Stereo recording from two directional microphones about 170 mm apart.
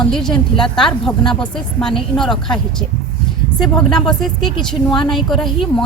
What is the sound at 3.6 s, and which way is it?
Speech, 5° left (ahead or behind).